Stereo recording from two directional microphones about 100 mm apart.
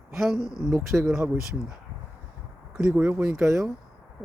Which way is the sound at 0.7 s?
35° right (ahead or behind).